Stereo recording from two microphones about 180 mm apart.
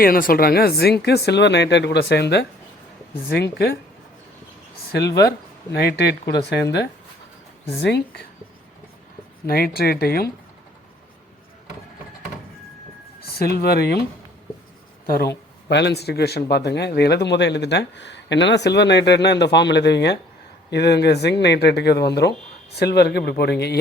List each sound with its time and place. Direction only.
0.0 s a man's voice: 55° left (ahead or behind)
4.9 s a man's voice: 65° left (ahead or behind)
9.5 s speech: 55° left (ahead or behind)
13.4 s speech: 60° left (ahead or behind)
15.7 s a man's voice: 70° left (ahead or behind)